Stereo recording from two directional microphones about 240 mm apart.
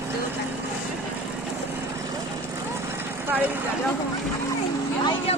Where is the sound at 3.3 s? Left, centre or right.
Centre.